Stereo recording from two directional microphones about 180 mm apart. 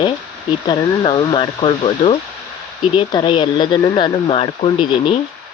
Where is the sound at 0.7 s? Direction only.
25° left (ahead or behind).